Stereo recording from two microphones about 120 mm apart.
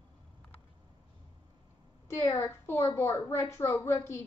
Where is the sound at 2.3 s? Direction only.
25° left (ahead or behind).